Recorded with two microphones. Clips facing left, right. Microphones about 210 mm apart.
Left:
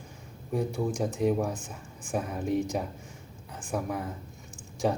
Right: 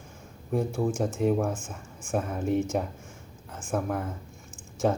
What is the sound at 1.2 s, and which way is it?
Speech, centre (ahead or behind).